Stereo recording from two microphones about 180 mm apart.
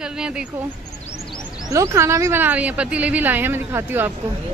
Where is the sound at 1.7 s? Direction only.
15° right (ahead or behind).